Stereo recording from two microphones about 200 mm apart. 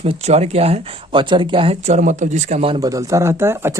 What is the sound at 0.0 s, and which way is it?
Speech, 30° right (ahead or behind).